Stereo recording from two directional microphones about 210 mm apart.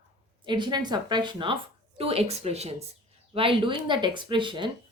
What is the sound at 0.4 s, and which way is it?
Speech, 20° right (ahead or behind).